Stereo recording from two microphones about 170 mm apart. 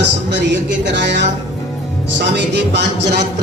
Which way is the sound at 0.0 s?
90° right.